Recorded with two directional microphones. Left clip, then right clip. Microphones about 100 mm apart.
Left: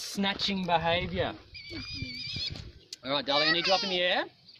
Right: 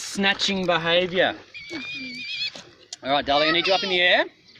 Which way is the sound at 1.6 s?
65° right (ahead or behind).